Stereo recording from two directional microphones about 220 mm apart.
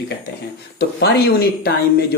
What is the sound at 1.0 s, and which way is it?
Speech, 45° left (ahead or behind).